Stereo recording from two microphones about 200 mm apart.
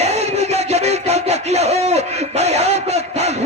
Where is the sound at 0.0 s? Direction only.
30° right (ahead or behind).